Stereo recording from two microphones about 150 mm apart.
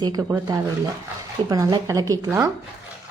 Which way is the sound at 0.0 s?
25° right (ahead or behind).